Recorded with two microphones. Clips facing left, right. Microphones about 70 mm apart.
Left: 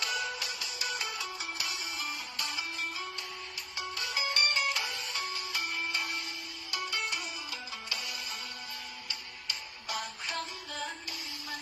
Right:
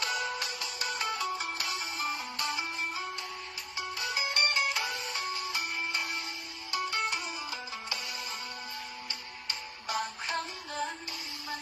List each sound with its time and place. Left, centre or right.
0.0 s music: right
9.5 s music: right